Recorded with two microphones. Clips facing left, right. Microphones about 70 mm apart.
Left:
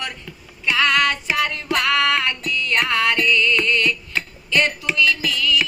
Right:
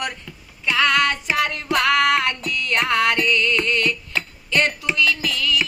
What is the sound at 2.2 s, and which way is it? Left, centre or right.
Music, right.